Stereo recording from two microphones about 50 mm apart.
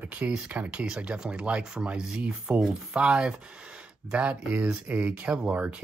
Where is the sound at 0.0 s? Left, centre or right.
Right.